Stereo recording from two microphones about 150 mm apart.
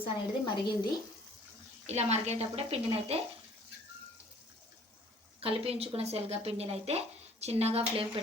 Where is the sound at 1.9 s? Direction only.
45° right (ahead or behind).